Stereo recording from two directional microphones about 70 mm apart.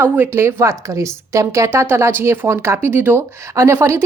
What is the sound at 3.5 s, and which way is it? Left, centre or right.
Speech, right.